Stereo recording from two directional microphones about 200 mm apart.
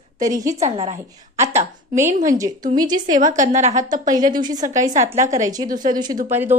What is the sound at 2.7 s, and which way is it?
Speech, 20° right (ahead or behind).